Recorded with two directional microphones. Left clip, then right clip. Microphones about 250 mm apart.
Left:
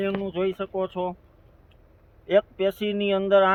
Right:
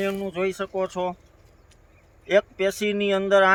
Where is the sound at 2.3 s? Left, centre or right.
Centre.